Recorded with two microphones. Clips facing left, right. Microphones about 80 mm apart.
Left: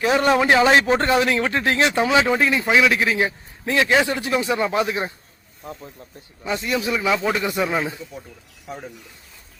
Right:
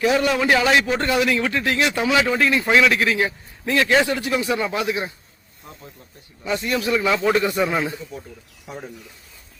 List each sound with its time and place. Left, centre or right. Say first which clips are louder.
0.0 s a man's voice: left 1 dB; left
2.6 s speech: right 1 dB; centre
2.9 s speech: even; centre
6.4 s speech: right 1 dB; left; by 8.9 s centre